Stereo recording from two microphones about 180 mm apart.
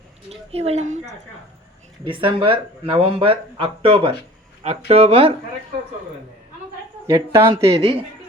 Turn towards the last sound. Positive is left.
turn(degrees=-15)  # may be behind; listen again after turning